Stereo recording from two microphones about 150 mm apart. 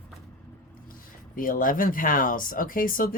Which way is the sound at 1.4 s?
65° left (ahead or behind).